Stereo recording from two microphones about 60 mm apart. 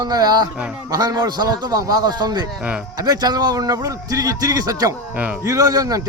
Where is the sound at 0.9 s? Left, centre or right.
Right.